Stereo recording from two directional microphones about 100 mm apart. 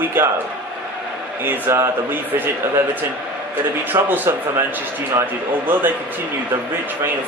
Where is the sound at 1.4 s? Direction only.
25° right (ahead or behind).